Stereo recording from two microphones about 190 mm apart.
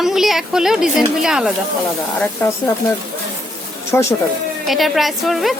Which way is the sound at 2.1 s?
10° left (ahead or behind).